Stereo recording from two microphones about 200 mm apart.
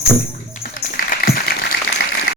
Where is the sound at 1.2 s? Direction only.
50° left (ahead or behind).